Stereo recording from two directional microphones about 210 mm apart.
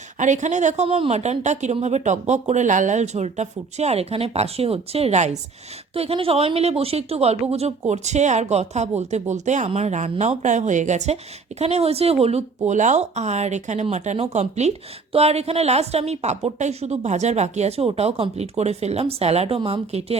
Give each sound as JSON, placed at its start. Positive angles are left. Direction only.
{"t": 0.2, "sound": "speech", "side_deg": -35}